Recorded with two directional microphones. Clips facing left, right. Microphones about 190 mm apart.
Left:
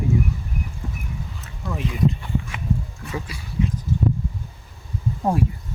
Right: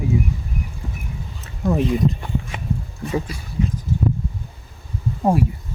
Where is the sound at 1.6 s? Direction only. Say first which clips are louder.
Right 5 dB; 40° right (ahead or behind).